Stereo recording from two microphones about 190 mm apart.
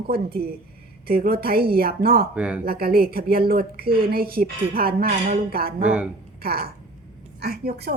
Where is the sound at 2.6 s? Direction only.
55° right (ahead or behind).